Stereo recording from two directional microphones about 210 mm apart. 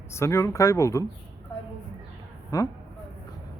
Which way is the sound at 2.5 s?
15° left (ahead or behind).